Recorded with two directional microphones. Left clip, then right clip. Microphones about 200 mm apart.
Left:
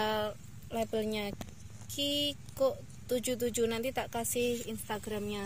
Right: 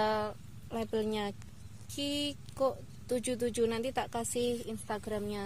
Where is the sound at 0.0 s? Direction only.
25° right (ahead or behind).